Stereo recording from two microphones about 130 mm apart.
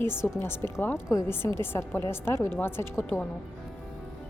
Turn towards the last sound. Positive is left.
turn(degrees=20)  # may be behind; listen again after turning